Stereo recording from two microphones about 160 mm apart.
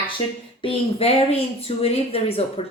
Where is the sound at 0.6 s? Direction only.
40° left (ahead or behind).